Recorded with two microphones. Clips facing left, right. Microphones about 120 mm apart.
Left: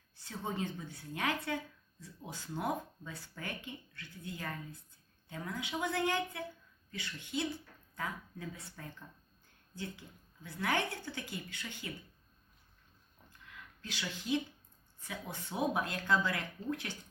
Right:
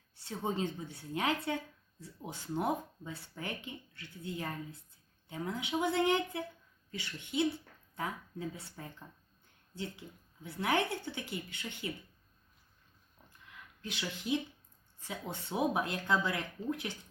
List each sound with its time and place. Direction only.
0.3 s a woman's voice: 25° right (ahead or behind)
13.8 s a woman's voice: 20° right (ahead or behind)